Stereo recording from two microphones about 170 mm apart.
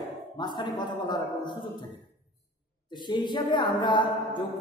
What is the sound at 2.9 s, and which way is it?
A woman's voice, 25° left (ahead or behind).